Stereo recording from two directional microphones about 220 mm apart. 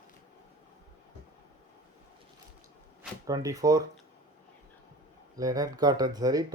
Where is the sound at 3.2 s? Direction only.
15° right (ahead or behind).